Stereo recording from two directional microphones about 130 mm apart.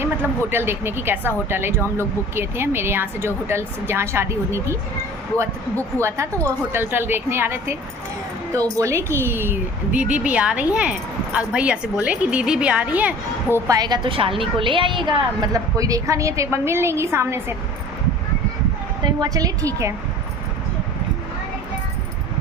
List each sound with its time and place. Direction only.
0.0 s a woman's voice: 15° right (ahead or behind)
13.7 s a woman's voice: 30° right (ahead or behind)
19.0 s a woman's voice: 30° right (ahead or behind)